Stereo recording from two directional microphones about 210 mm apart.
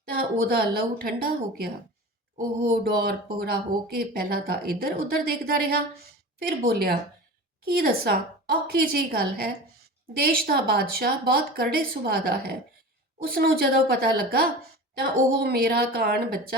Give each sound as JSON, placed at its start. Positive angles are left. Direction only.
{"t": 0.0, "sound": "speech", "side_deg": -45}
{"t": 2.8, "sound": "speech", "side_deg": -45}